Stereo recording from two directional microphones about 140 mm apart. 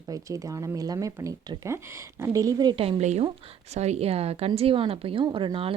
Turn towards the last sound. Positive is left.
turn(degrees=-40)  # may be behind; listen again after turning